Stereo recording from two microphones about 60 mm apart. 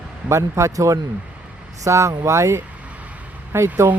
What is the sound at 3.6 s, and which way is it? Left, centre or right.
Speech, right.